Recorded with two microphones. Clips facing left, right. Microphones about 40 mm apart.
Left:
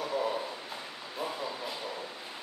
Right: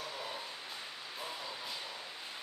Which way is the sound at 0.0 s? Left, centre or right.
Left.